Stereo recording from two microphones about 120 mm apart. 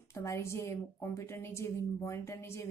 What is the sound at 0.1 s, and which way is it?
A woman's voice, 25° left (ahead or behind).